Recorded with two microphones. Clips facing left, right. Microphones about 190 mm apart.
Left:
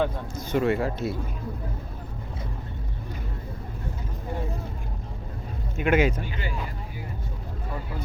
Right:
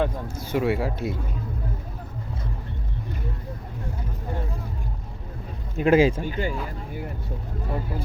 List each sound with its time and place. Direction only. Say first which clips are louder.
0.0 s speech: right 1 dB; 10° right (ahead or behind)
5.7 s speech: right 4 dB; 35° right (ahead or behind)
6.2 s speech: right 7 dB; 45° right (ahead or behind)